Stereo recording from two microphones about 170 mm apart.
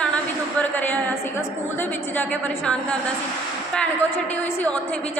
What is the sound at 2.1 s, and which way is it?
Speech, 10° left (ahead or behind).